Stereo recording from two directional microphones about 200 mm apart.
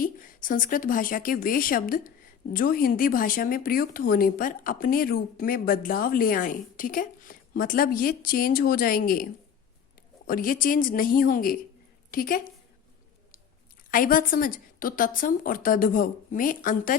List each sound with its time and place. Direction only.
0.0 s speech: 45° left (ahead or behind)
10.2 s speech: 45° left (ahead or behind)
13.9 s speech: 45° left (ahead or behind)